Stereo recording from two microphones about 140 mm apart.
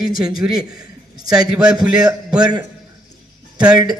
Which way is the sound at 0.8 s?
30° right (ahead or behind).